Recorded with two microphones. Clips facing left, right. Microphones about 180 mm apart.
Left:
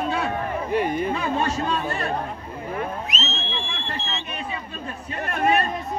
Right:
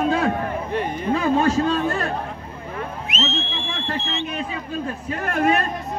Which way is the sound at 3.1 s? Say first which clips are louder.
Right 5 dB; 40° left (ahead or behind).